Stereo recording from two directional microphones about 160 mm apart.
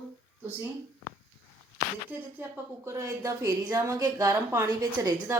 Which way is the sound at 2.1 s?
10° right (ahead or behind).